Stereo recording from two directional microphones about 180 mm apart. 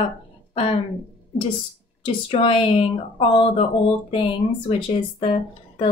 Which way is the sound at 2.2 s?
30° left (ahead or behind).